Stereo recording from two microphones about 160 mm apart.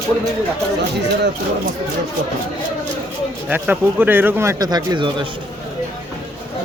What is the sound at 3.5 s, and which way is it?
Speech, 10° right (ahead or behind).